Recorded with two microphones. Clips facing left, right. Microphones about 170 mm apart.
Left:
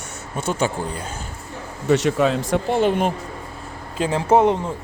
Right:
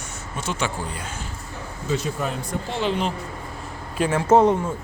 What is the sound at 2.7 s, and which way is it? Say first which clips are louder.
Speech: left 5 dB; 50° left (ahead or behind).